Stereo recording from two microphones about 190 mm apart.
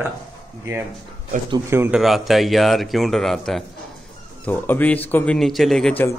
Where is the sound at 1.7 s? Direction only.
10° right (ahead or behind).